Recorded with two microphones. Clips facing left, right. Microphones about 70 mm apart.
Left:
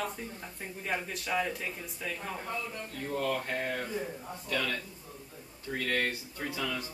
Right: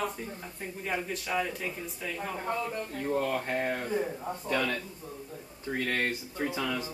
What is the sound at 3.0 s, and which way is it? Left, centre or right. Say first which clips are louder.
Speech: right 2 dB; centre.